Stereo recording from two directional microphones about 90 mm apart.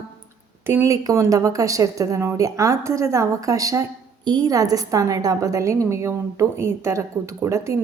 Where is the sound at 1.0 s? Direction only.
40° right (ahead or behind).